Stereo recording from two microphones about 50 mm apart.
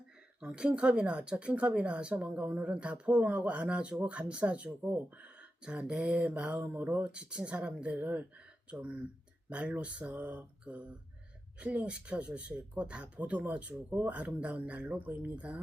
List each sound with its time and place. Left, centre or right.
0.4 s speech: right